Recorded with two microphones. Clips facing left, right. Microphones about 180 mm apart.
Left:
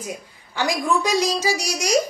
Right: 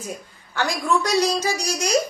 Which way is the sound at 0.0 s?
10° left (ahead or behind).